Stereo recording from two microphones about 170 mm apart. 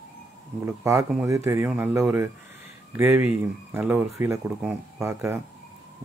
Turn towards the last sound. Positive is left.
turn(degrees=-15)  # may be behind; listen again after turning